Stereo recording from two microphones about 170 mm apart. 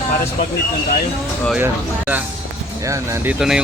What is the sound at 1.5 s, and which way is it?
Speech, 10° right (ahead or behind).